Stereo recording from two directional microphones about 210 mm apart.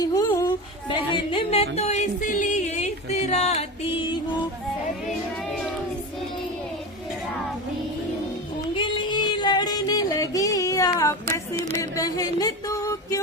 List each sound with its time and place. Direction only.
0.0 s music: 15° left (ahead or behind)
8.7 s music: 20° left (ahead or behind)
11.7 s a sound: 15° left (ahead or behind)